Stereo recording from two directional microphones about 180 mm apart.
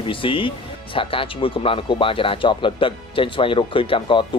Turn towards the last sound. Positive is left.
turn(degrees=30)  # may be behind; listen again after turning